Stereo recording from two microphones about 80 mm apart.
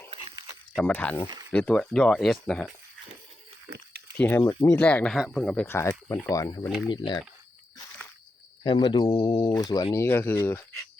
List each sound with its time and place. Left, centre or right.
0.9 s speech: centre
4.2 s speech: left
5.1 s speech: centre
5.4 s speech: centre
5.6 s speech: left
6.3 s speech: left
6.9 s speech: left
8.6 s speech: left
9.0 s speech: left
9.6 s speech: left
9.9 s speech: left